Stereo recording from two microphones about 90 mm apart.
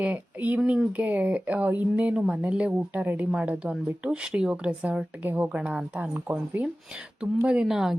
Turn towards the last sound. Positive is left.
turn(degrees=-5)  # may be behind; listen again after turning